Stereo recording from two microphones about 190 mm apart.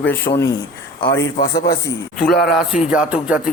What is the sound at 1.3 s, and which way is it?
Speech, 55° left (ahead or behind).